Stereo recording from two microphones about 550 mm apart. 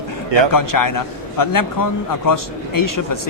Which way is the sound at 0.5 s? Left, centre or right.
Left.